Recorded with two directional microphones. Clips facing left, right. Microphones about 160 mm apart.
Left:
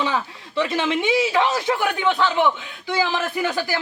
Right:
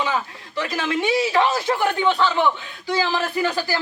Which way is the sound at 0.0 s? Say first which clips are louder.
Even; 25° left (ahead or behind).